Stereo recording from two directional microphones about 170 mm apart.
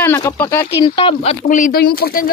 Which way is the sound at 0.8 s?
30° left (ahead or behind).